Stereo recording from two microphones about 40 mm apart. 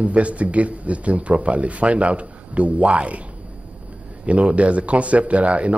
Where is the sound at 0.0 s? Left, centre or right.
Right.